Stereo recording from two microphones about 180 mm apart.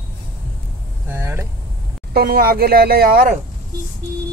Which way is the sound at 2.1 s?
55° right (ahead or behind).